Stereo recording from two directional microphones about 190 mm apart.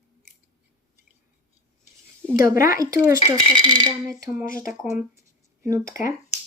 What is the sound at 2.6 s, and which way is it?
Speech, 15° right (ahead or behind).